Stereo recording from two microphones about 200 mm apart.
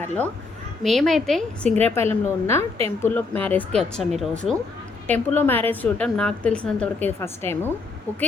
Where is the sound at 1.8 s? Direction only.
10° left (ahead or behind).